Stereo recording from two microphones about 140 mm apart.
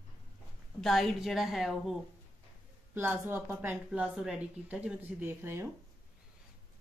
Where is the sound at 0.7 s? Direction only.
Centre (ahead or behind).